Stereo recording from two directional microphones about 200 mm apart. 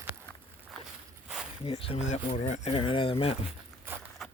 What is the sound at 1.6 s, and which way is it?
Speech, 30° left (ahead or behind).